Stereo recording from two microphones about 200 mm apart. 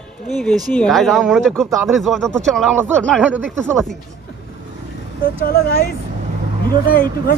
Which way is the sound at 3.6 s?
5° left (ahead or behind).